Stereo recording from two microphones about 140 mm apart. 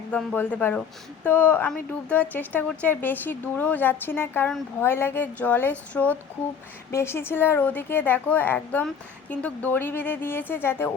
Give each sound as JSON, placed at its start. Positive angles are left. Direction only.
{"t": 0.1, "sound": "speech", "side_deg": 10}